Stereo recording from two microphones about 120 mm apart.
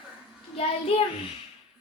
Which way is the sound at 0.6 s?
55° left (ahead or behind).